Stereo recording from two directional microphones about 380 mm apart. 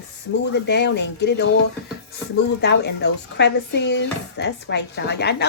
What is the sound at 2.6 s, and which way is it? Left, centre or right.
Speech, left.